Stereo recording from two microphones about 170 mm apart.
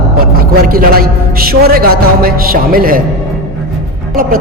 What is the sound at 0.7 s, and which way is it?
A man's voice, 60° right (ahead or behind).